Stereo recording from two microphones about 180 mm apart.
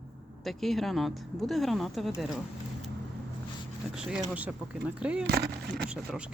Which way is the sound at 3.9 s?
5° right (ahead or behind).